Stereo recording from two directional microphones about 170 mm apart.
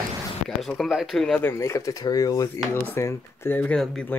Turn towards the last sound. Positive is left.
turn(degrees=10)  # may be behind; listen again after turning